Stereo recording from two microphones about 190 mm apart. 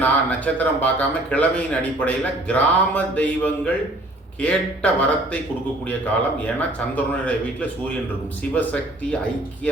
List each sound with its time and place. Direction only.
0.0 s a man's voice: 10° left (ahead or behind)
6.7 s a man's voice: 5° left (ahead or behind)